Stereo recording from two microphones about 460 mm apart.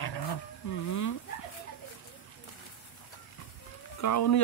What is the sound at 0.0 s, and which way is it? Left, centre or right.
Wild animals, left.